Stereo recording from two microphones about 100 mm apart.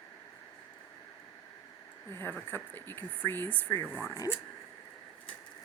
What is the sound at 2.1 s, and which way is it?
Speech, 25° left (ahead or behind).